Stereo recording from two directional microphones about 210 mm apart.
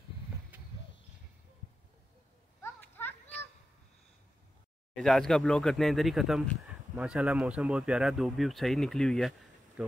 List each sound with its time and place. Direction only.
2.6 s children playing: 10° left (ahead or behind)
4.9 s speech: centre (ahead or behind)
9.8 s a sound: 5° right (ahead or behind)